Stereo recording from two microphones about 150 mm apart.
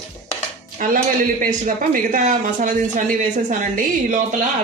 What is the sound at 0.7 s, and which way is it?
Speech, 65° right (ahead or behind).